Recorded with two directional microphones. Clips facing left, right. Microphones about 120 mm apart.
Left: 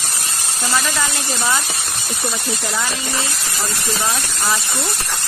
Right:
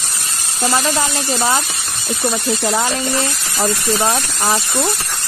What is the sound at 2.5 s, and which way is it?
Speech, 40° right (ahead or behind).